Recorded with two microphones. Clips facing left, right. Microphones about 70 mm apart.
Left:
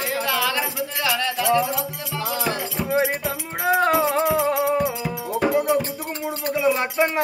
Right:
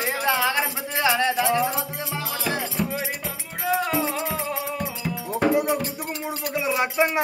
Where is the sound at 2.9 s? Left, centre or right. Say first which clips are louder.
Left 8 dB; left.